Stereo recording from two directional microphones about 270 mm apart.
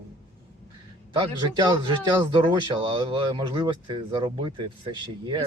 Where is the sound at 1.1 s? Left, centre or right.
Centre.